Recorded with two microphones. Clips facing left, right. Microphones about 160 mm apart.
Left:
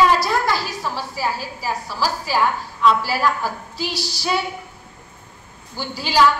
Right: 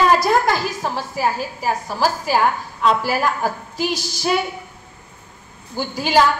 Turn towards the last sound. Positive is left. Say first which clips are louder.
# right 2 dB
turn(degrees=-50)  # may be behind; listen again after turning